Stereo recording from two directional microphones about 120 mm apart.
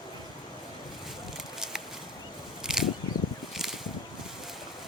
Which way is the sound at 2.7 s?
5° right (ahead or behind).